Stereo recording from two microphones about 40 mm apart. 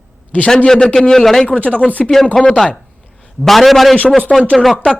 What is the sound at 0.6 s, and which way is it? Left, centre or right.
Speech, centre.